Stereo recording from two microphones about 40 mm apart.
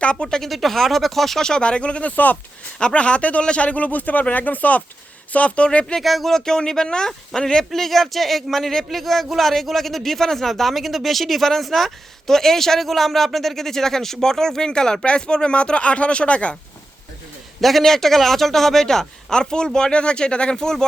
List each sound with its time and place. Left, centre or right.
0.0 s speech: left
0.4 s speech: centre
1.6 s speech: left
2.1 s speech: left
2.9 s speech: left
5.6 s speech: left
6.0 s speech: centre
6.3 s speech: centre
7.7 s speech: centre; by 16.6 s left
17.6 s speech: centre